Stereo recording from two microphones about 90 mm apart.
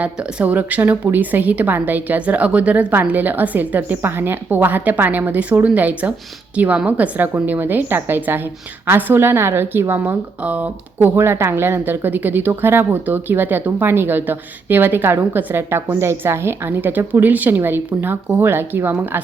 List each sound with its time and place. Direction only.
0.0 s a woman's voice: 15° right (ahead or behind)